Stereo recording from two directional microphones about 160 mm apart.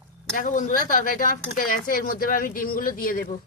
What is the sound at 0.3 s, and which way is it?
Speech, 55° left (ahead or behind).